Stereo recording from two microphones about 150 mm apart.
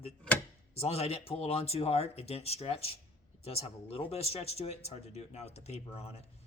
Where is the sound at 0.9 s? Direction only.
40° left (ahead or behind).